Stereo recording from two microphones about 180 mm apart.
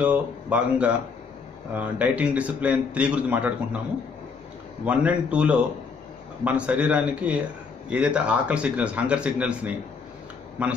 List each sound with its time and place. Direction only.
0.0 s a man's voice: 5° right (ahead or behind)
4.8 s a man's voice: 5° right (ahead or behind)